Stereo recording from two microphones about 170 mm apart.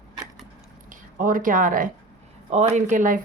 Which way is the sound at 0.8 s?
50° right (ahead or behind).